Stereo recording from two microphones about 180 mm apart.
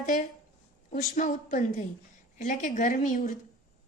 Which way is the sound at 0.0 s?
50° left (ahead or behind).